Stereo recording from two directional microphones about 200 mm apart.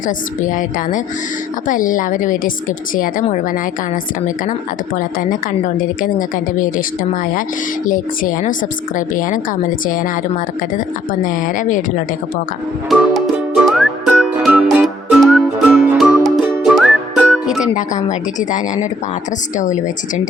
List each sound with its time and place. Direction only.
0.4 s a woman's voice: 40° left (ahead or behind)
4.9 s a woman's voice: 40° left (ahead or behind)
11.2 s a woman's voice: 40° left (ahead or behind)
12.9 s music: centre (ahead or behind)
17.7 s a woman's voice: 40° left (ahead or behind)